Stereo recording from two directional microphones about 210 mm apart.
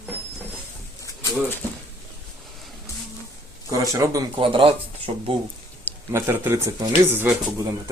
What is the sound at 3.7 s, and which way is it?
Speech, 15° right (ahead or behind).